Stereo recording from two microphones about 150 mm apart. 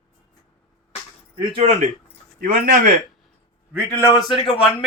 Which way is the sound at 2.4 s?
65° right (ahead or behind).